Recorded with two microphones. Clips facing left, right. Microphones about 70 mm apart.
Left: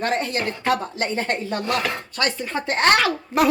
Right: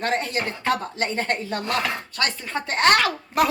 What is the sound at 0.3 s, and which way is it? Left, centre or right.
Speech, centre.